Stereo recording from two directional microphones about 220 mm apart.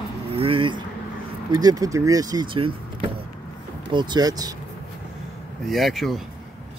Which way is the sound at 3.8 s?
20° right (ahead or behind).